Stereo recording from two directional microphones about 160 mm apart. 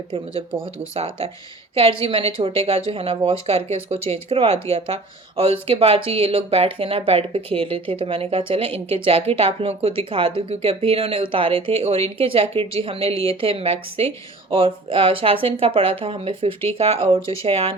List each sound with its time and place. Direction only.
0.1 s speech: 35° right (ahead or behind)